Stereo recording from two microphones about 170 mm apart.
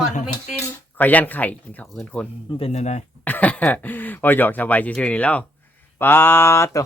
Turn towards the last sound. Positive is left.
turn(degrees=15)  # may be behind; listen again after turning